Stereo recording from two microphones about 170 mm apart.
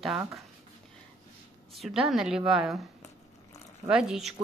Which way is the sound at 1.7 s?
Centre (ahead or behind).